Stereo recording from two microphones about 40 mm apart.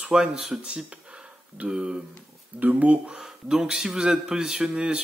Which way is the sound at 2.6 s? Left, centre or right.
Right.